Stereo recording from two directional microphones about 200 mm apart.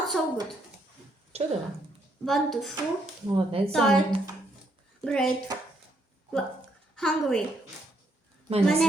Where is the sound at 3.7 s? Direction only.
5° left (ahead or behind).